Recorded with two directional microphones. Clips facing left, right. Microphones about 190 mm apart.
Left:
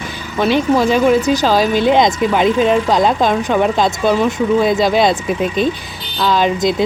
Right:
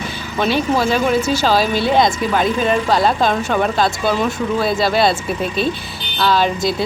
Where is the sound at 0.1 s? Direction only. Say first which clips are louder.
Left 4 dB; 15° left (ahead or behind).